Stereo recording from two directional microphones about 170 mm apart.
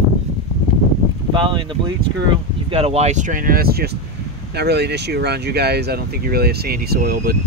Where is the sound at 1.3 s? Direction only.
25° right (ahead or behind).